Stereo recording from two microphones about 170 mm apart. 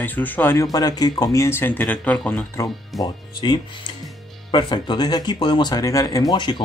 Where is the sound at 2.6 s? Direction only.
20° left (ahead or behind).